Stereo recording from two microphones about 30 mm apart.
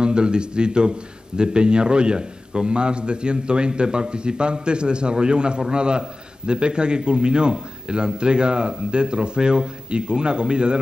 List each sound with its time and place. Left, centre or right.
0.0 s a man's voice: right